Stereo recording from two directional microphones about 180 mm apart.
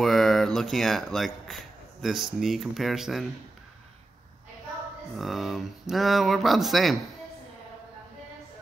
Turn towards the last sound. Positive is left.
turn(degrees=0)  # may be behind; listen again after turning